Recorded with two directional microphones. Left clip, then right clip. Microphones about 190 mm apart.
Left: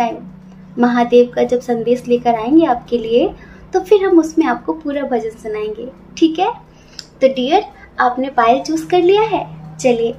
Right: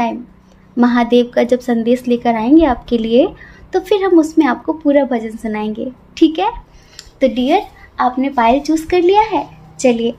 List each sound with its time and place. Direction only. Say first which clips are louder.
0.7 s a woman's voice: left 1 dB; 45° right (ahead or behind)